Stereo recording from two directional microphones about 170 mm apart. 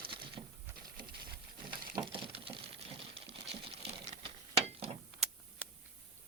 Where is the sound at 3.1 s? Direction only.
30° right (ahead or behind).